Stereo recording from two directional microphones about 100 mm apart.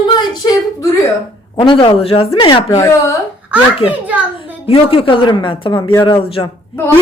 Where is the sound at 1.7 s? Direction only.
60° left (ahead or behind).